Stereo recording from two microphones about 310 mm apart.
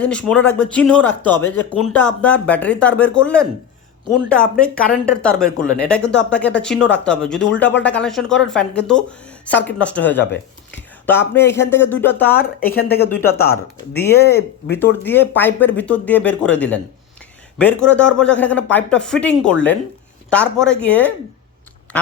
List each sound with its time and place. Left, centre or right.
0.0 s speech: centre
14.3 s speech: left
15.0 s speech: centre